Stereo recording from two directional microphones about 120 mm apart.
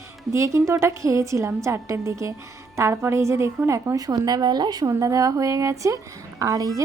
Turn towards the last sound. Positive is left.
turn(degrees=-30)  # may be behind; listen again after turning